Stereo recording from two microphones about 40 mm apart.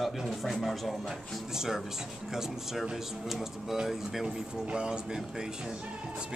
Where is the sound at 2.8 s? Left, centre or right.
Centre.